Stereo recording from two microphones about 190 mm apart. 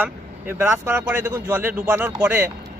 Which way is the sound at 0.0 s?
10° right (ahead or behind).